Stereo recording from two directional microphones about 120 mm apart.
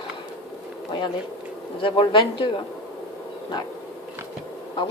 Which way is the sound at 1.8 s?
45° left (ahead or behind).